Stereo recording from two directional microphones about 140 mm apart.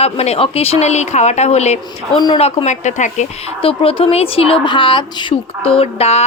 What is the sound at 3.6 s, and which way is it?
A woman's voice, 40° left (ahead or behind).